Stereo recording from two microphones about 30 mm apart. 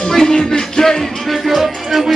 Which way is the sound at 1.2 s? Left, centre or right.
Centre.